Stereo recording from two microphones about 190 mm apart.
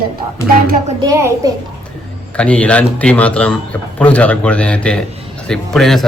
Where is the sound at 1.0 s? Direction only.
15° right (ahead or behind).